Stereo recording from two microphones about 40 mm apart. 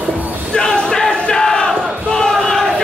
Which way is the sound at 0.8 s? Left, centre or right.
Centre.